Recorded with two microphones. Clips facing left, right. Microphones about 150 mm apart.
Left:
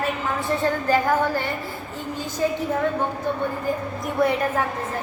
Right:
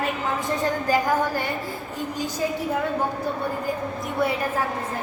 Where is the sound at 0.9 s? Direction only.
10° right (ahead or behind).